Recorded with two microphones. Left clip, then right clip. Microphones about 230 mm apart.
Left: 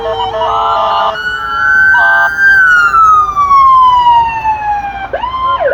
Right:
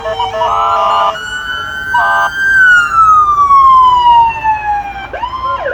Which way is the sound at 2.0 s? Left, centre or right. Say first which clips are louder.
Left 3 dB; right.